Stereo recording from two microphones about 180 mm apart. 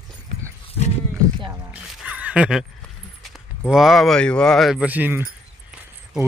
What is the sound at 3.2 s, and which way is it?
Speech, centre (ahead or behind).